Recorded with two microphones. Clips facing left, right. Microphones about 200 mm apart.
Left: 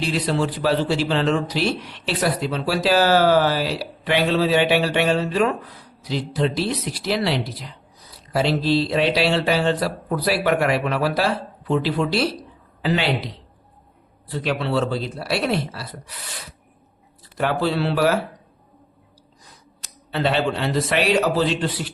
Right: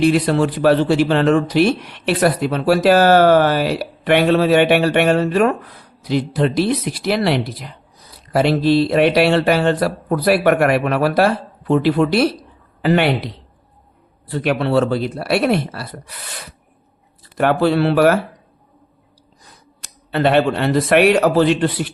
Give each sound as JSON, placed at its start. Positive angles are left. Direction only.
{"t": 0.0, "sound": "speech", "side_deg": -60}
{"t": 17.3, "sound": "speech", "side_deg": -60}
{"t": 19.8, "sound": "speech", "side_deg": -60}